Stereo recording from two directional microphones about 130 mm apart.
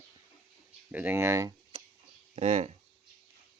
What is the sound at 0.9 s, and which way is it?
Speech, 15° right (ahead or behind).